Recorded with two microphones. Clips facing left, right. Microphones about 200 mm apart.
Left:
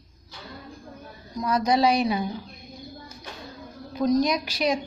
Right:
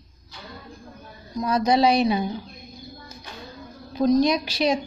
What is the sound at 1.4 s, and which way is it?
Speech, 25° right (ahead or behind).